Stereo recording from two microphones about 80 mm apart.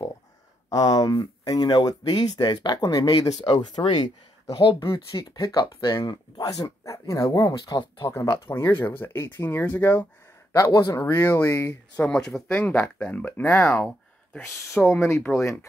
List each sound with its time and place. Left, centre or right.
0.7 s speech: left
4.6 s speech: left
4.8 s speech: left
5.5 s speech: left
8.5 s speech: left
10.5 s speech: left
12.0 s speech: centre
12.5 s speech: left
14.8 s speech: left